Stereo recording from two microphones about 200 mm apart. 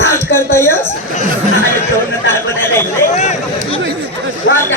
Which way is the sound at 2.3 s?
10° left (ahead or behind).